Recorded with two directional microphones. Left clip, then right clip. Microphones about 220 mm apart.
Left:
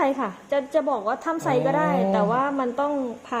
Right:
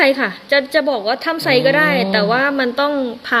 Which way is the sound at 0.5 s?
45° right (ahead or behind).